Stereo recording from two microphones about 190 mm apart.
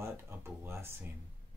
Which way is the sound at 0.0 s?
10° right (ahead or behind).